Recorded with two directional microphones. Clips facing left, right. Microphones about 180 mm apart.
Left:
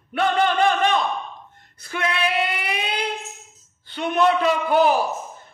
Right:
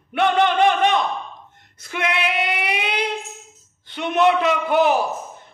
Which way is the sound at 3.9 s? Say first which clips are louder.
Right 2 dB; 25° right (ahead or behind).